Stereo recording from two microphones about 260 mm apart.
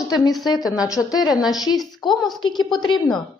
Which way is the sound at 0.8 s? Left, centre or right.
Centre.